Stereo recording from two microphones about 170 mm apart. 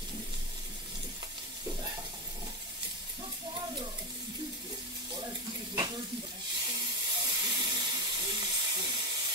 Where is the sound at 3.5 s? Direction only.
25° right (ahead or behind).